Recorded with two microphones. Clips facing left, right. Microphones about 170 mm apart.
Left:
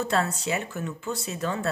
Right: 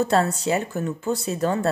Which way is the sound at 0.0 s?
40° right (ahead or behind).